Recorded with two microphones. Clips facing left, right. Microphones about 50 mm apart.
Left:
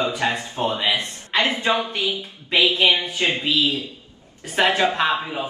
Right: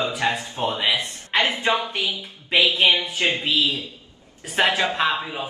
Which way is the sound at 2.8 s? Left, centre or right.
Left.